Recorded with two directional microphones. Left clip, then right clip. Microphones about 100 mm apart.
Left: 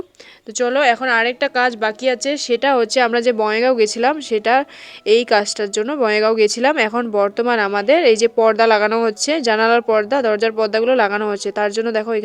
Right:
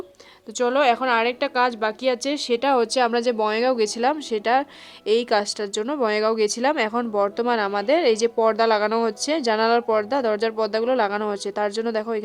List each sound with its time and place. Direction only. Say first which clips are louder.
0.6 s speech: left 4 dB; 10° left (ahead or behind)